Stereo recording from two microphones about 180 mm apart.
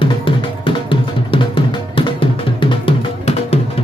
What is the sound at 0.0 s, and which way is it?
Music, 30° left (ahead or behind).